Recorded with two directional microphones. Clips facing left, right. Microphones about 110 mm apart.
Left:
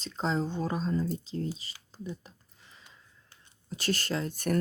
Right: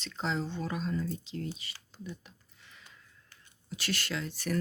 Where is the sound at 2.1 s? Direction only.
35° left (ahead or behind).